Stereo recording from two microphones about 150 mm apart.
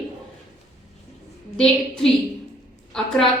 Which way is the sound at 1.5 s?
5° left (ahead or behind).